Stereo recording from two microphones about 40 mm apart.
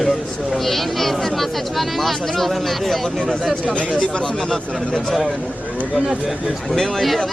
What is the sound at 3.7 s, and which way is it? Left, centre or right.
Speech, left.